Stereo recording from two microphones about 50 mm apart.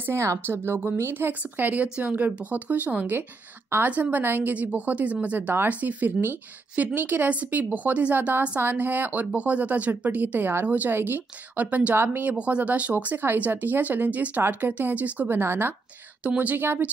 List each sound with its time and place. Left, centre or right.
0.1 s speech: right
1.1 s a woman's voice: right
11.9 s speech: right
12.3 s a woman's voice: right
15.2 s speech: right
16.3 s a woman's voice: right